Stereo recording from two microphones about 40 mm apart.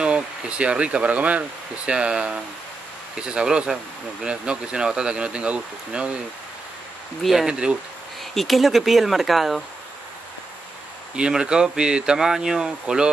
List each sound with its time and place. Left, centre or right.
0.0 s speech: right
1.9 s speech: right
7.4 s speech: right
8.2 s speech: centre
11.1 s speech: right
12.2 s speech: centre